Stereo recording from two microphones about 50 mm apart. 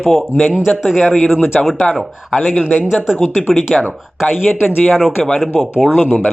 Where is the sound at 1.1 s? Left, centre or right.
Centre.